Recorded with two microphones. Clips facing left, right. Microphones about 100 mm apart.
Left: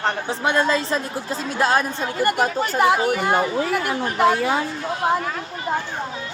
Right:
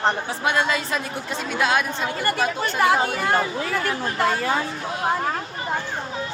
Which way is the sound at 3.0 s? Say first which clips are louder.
Left 3 dB; 20° left (ahead or behind).